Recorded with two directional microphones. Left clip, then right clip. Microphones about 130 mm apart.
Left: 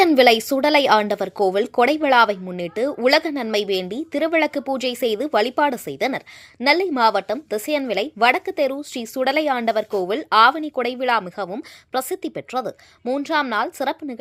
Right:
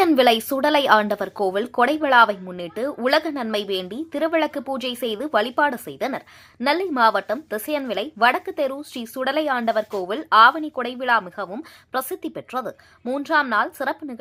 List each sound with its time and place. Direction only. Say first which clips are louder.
0.0 s speech: left 3 dB; 35° left (ahead or behind)
11.5 s a woman's voice: left 1 dB; 30° left (ahead or behind)
13.3 s speech: right 3 dB; 40° left (ahead or behind)